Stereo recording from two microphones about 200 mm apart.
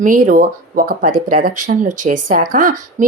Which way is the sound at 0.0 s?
40° right (ahead or behind).